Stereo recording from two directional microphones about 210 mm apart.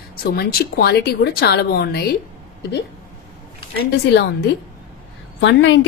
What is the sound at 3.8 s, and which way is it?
Speech, 50° left (ahead or behind).